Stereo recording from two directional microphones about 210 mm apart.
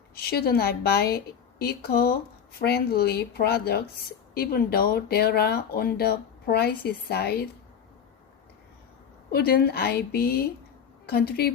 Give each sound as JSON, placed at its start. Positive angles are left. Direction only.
{"t": 0.2, "sound": "speech", "side_deg": 50}
{"t": 9.3, "sound": "speech", "side_deg": 50}